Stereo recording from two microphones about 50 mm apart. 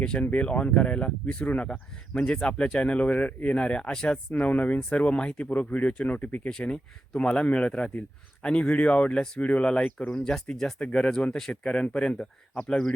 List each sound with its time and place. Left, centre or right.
0.2 s speech: left
4.4 s speech: left
6.5 s speech: centre
10.1 s speech: centre
10.9 s speech: left